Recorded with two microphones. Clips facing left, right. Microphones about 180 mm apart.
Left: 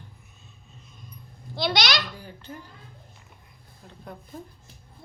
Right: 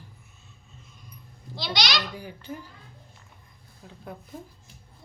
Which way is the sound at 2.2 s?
10° right (ahead or behind).